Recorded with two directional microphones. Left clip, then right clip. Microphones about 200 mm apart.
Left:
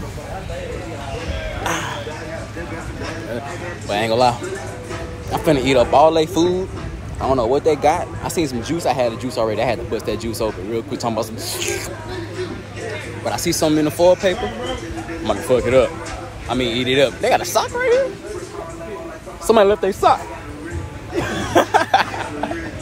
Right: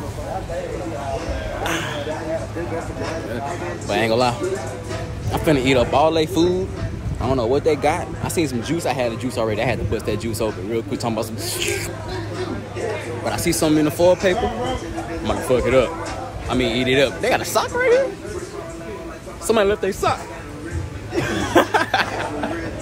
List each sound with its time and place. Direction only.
1.6 s music: 5° left (ahead or behind)
3.9 s speech: 15° right (ahead or behind)
13.2 s speech: 10° right (ahead or behind)
19.4 s speech: 10° left (ahead or behind)
21.2 s a sound: 10° right (ahead or behind)